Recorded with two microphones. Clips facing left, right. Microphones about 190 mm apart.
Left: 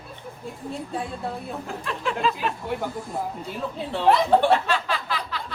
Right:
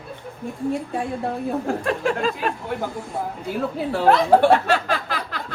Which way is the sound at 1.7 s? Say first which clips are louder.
Right 6 dB; 50° right (ahead or behind).